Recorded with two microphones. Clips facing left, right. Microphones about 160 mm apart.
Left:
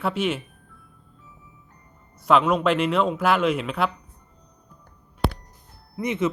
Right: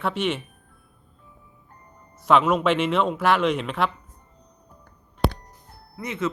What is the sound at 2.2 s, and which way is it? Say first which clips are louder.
Speech: even; centre (ahead or behind).